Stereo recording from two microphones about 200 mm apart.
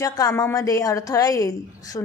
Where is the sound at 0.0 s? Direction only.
20° left (ahead or behind).